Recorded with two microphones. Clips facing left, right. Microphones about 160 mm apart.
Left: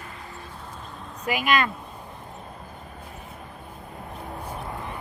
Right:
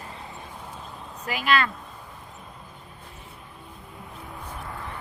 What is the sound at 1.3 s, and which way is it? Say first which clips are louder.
Speech: left 1 dB; 15° left (ahead or behind).